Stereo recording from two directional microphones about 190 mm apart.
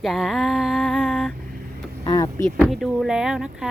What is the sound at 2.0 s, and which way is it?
Speech, 20° left (ahead or behind).